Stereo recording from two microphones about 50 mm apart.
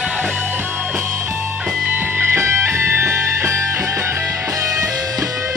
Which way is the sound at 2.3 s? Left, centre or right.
Right.